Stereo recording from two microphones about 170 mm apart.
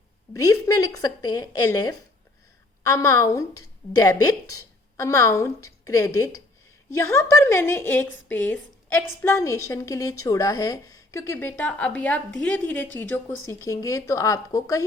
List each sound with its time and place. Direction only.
0.3 s a woman's voice: 20° left (ahead or behind)